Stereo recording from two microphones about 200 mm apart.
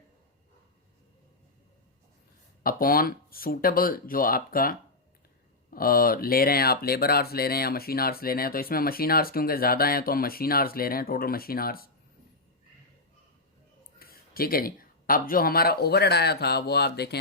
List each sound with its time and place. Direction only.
2.6 s speech: 45° left (ahead or behind)
5.7 s speech: 45° left (ahead or behind)
14.0 s speech: 50° left (ahead or behind)